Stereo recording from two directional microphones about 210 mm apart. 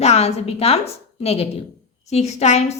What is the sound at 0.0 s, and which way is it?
A woman's voice, 30° left (ahead or behind).